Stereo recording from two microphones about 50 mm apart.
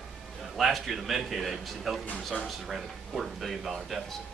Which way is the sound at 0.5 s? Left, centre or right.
Centre.